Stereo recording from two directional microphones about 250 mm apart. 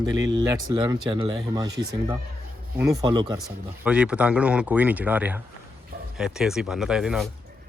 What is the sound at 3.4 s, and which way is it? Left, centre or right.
Speech, centre.